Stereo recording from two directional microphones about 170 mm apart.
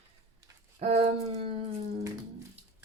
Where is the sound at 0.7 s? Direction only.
35° right (ahead or behind).